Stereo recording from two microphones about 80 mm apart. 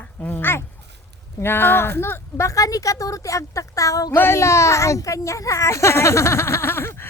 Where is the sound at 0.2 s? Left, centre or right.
Left.